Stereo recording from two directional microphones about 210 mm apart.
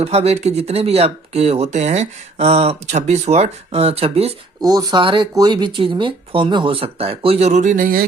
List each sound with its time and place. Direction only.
0.0 s speech: 30° right (ahead or behind)
4.6 s speech: 15° right (ahead or behind); by 8.0 s 40° right (ahead or behind)